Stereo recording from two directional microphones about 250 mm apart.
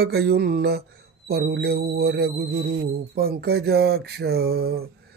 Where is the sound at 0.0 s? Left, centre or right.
Right.